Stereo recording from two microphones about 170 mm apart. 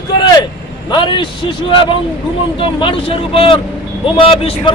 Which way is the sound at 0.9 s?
30° left (ahead or behind).